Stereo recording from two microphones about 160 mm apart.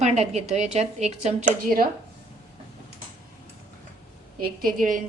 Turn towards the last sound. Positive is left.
turn(degrees=-55)  # may be behind; listen again after turning